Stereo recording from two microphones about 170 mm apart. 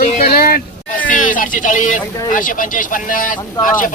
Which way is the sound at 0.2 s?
60° left (ahead or behind).